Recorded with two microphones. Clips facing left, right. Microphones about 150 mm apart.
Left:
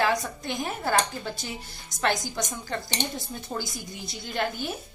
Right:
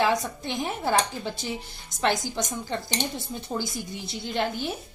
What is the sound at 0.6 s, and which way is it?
Speech, 5° right (ahead or behind).